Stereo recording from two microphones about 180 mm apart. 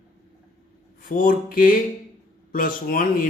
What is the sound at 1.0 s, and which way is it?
Speech, 50° left (ahead or behind).